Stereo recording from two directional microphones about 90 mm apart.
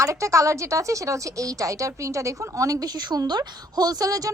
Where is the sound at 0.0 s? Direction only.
35° right (ahead or behind).